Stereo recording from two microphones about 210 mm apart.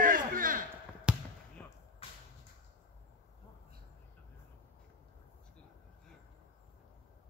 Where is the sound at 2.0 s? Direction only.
25° left (ahead or behind).